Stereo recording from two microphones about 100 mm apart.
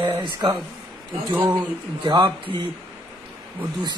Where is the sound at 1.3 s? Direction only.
20° right (ahead or behind).